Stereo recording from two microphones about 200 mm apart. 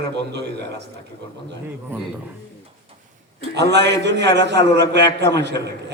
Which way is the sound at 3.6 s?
60° right (ahead or behind).